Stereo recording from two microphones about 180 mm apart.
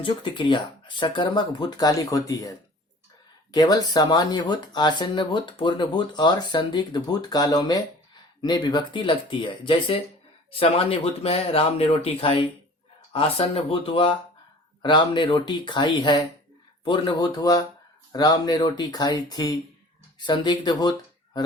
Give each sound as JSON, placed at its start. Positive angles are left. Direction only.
{"t": 0.0, "sound": "speech", "side_deg": 25}